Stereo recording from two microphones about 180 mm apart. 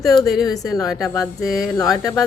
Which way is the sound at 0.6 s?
20° left (ahead or behind).